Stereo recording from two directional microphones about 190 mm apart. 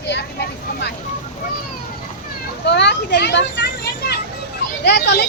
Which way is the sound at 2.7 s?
65° left (ahead or behind).